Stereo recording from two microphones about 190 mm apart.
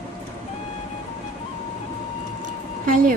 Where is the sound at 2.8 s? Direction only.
50° right (ahead or behind).